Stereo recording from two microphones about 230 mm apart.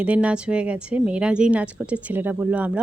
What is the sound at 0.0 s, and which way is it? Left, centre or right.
Speech, centre.